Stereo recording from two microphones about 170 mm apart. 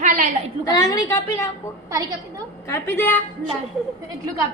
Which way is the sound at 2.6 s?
15° left (ahead or behind).